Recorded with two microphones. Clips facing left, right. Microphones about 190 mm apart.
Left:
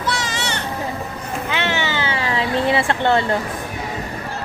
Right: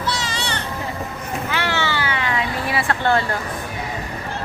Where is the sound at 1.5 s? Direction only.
20° left (ahead or behind).